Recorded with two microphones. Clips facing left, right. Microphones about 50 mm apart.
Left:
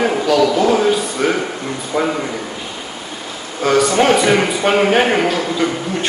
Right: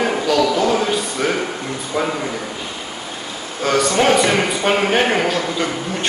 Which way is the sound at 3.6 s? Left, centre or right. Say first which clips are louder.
Left 3 dB; centre.